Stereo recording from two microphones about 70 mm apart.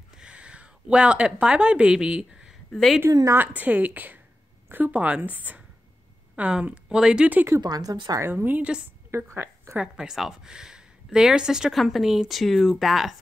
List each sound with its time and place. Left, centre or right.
0.2 s a woman's voice: centre
2.7 s speech: centre
3.1 s speech: right
3.3 s a woman's voice: right
7.6 s speech: right
8.2 s a woman's voice: right
8.5 s a woman's voice: centre
9.1 s speech: right
9.8 s speech: centre